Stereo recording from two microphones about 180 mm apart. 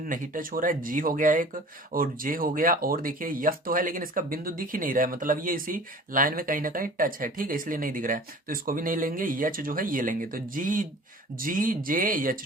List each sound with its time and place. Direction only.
0.0 s speech: 50° right (ahead or behind)